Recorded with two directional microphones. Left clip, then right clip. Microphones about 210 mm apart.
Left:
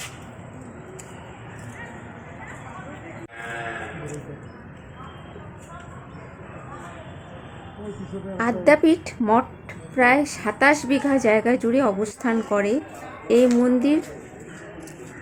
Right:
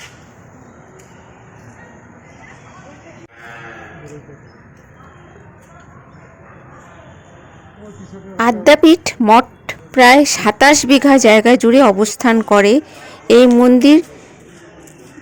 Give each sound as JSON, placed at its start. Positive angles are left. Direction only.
{"t": 8.4, "sound": "a woman's voice", "side_deg": -40}